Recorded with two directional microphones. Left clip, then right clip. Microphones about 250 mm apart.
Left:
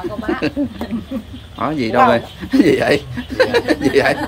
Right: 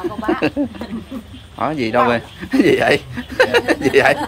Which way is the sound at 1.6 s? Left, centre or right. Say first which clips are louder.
Left 2 dB; centre.